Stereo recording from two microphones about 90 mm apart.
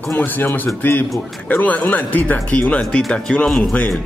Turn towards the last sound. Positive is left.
turn(degrees=10)  # may be behind; listen again after turning